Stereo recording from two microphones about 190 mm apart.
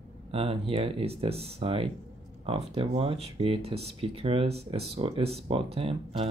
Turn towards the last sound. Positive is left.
turn(degrees=-30)  # may be behind; listen again after turning